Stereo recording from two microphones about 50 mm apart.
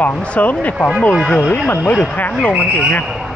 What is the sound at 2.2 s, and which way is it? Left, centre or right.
Speech, left.